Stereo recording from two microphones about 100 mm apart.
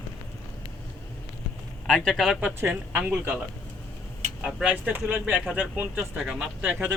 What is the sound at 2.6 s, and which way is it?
Speech, 20° right (ahead or behind).